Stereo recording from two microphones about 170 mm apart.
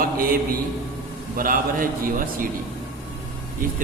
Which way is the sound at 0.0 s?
55° right (ahead or behind).